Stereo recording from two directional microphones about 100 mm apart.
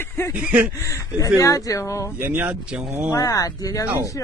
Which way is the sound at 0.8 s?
30° left (ahead or behind).